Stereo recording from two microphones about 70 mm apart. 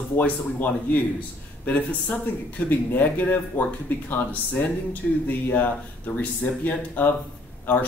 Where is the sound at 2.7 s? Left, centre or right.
Left.